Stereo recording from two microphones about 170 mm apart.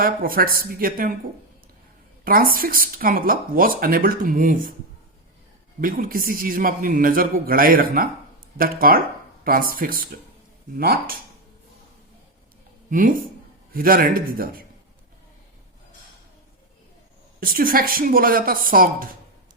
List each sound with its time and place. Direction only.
0.0 s speech: 60° right (ahead or behind)
2.2 s speech: 60° right (ahead or behind)
5.8 s speech: 55° right (ahead or behind)
12.9 s speech: 55° right (ahead or behind)
17.4 s speech: 55° right (ahead or behind)